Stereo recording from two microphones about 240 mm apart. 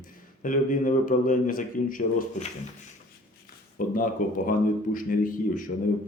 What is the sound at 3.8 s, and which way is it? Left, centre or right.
Speech, left.